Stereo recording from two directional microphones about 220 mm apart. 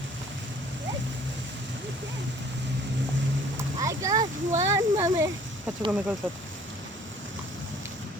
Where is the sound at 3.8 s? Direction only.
15° right (ahead or behind).